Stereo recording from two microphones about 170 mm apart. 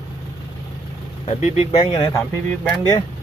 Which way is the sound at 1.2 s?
40° left (ahead or behind).